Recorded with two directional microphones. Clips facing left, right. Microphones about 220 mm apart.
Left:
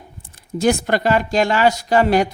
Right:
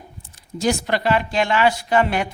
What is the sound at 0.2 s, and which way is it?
Speech, 55° left (ahead or behind).